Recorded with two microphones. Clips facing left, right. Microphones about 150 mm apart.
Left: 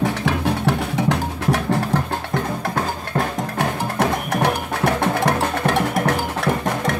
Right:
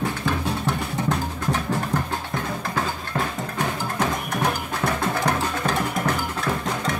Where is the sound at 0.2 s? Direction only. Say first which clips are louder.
Left 5 dB; 75° left (ahead or behind).